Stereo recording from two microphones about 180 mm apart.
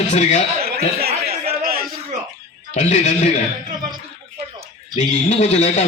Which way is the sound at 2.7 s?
40° left (ahead or behind).